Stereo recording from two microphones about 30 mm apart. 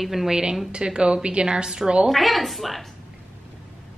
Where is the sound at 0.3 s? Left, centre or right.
Right.